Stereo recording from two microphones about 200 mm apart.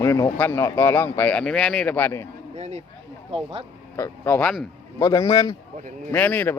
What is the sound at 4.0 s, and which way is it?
A man's voice, 10° left (ahead or behind).